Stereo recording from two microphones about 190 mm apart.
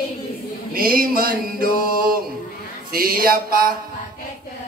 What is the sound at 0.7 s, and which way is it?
Speech, 50° right (ahead or behind).